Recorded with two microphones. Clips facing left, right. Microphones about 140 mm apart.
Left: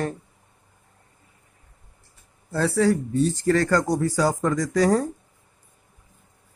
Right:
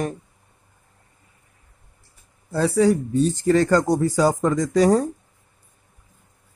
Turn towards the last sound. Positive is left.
turn(degrees=-20)  # may be behind; listen again after turning